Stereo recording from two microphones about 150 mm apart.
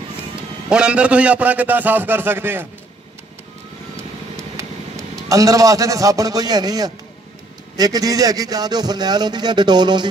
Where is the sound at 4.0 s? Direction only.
20° right (ahead or behind).